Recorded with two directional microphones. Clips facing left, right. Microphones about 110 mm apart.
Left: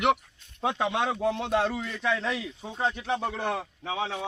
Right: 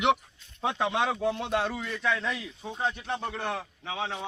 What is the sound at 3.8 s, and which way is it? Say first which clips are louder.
Speech: left 2 dB; 20° left (ahead or behind).